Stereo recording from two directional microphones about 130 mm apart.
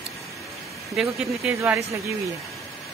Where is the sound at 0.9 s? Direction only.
Centre (ahead or behind).